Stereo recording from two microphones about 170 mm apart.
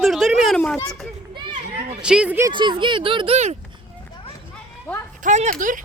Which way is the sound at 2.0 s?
5° right (ahead or behind).